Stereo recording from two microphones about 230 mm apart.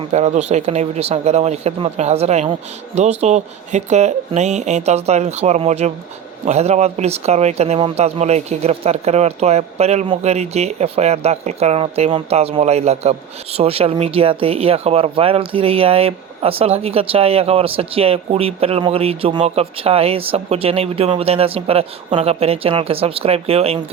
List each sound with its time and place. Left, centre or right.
0.1 s speech: right